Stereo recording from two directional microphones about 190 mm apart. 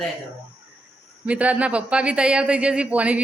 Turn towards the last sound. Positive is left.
turn(degrees=-5)  # may be behind; listen again after turning